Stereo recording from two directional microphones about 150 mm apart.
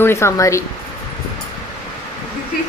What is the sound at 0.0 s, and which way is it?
Speech, 20° left (ahead or behind).